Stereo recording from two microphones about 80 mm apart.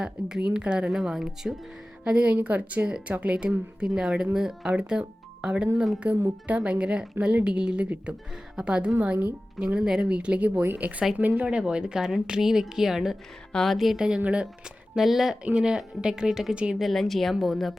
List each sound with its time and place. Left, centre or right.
0.0 s a woman's voice: centre
13.5 s speech: centre
13.7 s a woman's voice: centre
14.9 s a woman's voice: centre
16.8 s speech: centre